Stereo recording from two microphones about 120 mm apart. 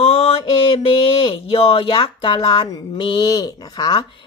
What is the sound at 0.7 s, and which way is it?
Speech, 50° left (ahead or behind).